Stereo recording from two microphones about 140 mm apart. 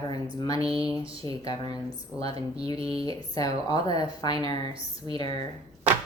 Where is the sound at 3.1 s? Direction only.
25° left (ahead or behind).